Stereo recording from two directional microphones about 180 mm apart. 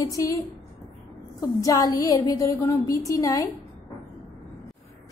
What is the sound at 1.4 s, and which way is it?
A woman's voice, 20° left (ahead or behind).